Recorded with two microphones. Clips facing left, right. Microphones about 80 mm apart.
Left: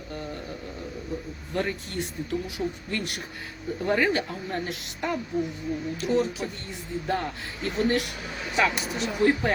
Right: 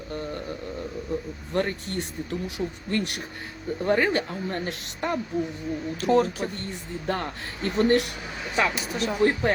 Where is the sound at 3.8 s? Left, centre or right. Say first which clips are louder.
Right 1 dB; right.